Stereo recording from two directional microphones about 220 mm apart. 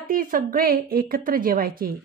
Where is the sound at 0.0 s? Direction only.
40° right (ahead or behind).